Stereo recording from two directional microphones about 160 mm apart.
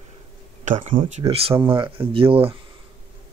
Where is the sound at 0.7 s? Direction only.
50° right (ahead or behind).